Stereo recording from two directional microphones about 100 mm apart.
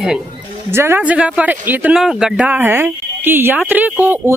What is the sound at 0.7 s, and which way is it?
Speech, 25° right (ahead or behind).